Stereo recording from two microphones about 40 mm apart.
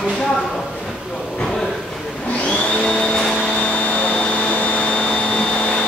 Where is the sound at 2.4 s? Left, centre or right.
Left.